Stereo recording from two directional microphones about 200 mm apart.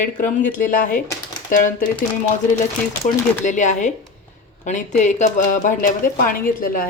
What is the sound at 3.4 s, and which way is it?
Speech, 35° left (ahead or behind).